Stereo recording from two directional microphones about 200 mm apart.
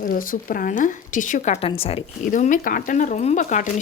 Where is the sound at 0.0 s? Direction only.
45° left (ahead or behind).